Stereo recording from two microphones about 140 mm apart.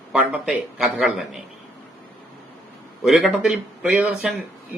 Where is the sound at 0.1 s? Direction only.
5° right (ahead or behind).